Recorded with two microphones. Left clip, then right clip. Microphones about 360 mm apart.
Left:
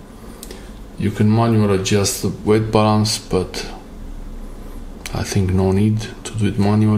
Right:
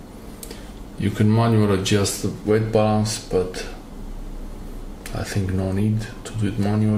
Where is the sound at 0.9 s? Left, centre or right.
Centre.